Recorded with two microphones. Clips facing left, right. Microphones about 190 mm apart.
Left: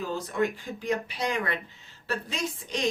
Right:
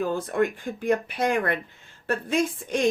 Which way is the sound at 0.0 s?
55° right (ahead or behind).